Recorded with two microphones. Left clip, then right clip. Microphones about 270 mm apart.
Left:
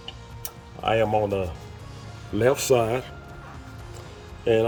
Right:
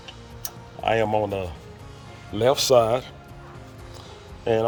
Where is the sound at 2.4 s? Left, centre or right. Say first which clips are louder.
Right 3 dB; centre.